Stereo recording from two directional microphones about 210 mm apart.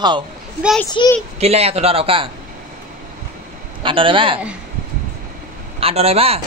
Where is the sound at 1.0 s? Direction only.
25° left (ahead or behind).